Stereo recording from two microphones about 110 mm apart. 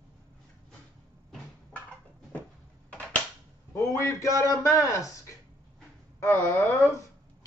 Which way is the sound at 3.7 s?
25° left (ahead or behind).